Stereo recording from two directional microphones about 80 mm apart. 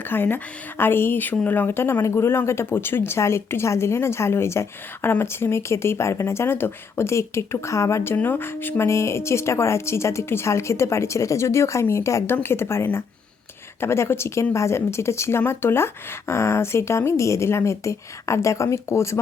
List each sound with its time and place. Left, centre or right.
0.0 s a woman's voice: left
8.1 s a woman's voice: left